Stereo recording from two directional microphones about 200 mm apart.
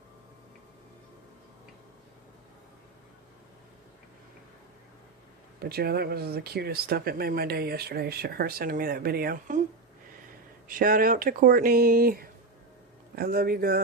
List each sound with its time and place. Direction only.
5.5 s speech: 50° right (ahead or behind)
10.7 s speech: 45° right (ahead or behind)